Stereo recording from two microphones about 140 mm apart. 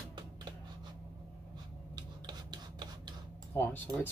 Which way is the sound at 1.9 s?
30° right (ahead or behind).